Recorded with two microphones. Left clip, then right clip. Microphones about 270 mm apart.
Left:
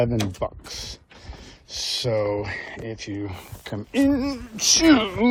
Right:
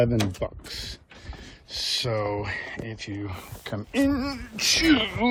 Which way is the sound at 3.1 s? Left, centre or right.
Centre.